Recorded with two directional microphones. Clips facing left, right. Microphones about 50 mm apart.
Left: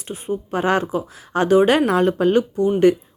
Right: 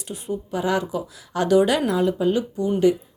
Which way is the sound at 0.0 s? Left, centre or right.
Left.